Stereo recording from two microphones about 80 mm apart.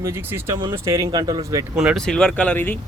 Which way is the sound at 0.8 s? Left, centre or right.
Right.